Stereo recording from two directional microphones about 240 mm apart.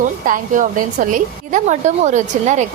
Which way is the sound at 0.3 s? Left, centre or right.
Right.